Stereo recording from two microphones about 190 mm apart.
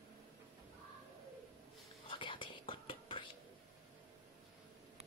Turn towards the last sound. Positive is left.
turn(degrees=25)  # may be behind; listen again after turning